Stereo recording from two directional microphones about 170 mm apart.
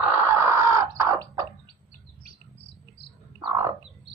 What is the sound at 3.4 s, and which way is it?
Frog, 25° right (ahead or behind).